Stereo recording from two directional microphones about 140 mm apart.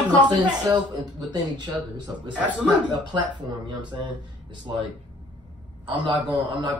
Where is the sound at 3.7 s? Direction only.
30° right (ahead or behind).